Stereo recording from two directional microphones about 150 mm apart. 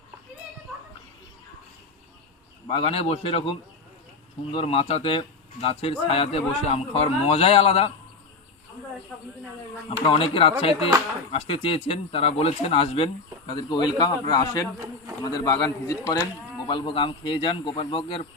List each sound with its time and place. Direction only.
2.6 s speech: 35° left (ahead or behind)
10.1 s speech: 40° left (ahead or behind); by 16.1 s 20° left (ahead or behind)
16.6 s speech: 30° left (ahead or behind)